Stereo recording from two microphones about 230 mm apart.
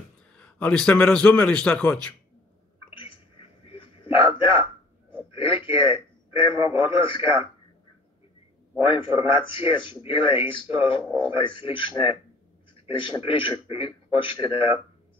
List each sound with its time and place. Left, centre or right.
0.3 s a man's voice: centre
3.6 s a sound: left
5.5 s speech: left
8.8 s speech: left